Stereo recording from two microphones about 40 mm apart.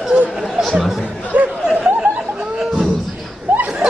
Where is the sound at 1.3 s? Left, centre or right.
Right.